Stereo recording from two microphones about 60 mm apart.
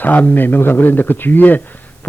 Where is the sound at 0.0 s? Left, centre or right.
Left.